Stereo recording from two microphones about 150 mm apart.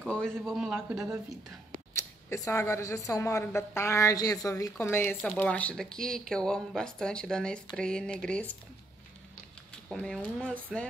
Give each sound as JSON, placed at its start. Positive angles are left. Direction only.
{"t": 0.0, "sound": "a sound", "side_deg": 5}
{"t": 0.4, "sound": "speech", "side_deg": -5}
{"t": 2.2, "sound": "a woman's voice", "side_deg": 20}
{"t": 9.9, "sound": "speech", "side_deg": 5}